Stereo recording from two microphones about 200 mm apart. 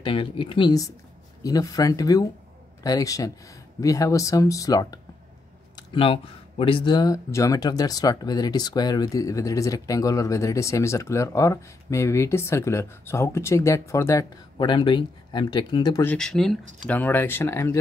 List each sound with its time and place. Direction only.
0.0 s speech: 25° left (ahead or behind)
16.1 s speech: 5° left (ahead or behind)